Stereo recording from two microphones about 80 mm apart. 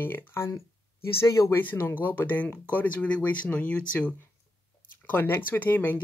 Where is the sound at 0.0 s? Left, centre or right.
Left.